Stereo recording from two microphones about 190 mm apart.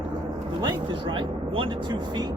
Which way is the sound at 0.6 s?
25° right (ahead or behind).